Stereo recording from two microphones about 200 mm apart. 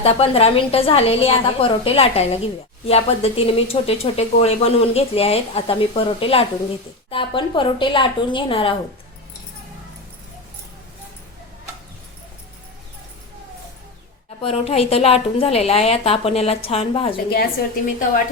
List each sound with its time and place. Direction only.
0.0 s a woman's voice: 30° left (ahead or behind)
14.4 s a woman's voice: 30° left (ahead or behind)
17.2 s a woman's voice: 50° left (ahead or behind)